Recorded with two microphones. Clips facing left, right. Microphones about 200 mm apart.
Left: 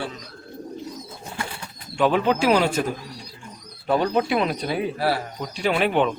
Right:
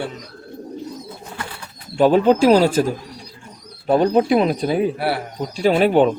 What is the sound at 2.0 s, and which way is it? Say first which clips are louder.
Speech: right 7 dB; 40° right (ahead or behind).